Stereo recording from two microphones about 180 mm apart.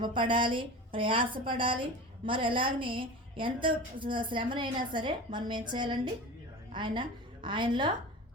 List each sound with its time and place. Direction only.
0.0 s a woman's voice: 25° right (ahead or behind)